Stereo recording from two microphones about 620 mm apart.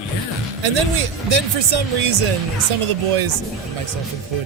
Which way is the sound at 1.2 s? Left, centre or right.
Right.